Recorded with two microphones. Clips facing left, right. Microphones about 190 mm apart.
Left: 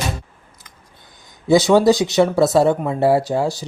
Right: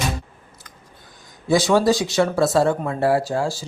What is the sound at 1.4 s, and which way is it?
Speech, 20° left (ahead or behind).